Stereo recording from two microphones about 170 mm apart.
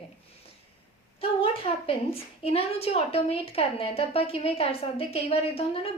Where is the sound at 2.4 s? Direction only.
35° left (ahead or behind).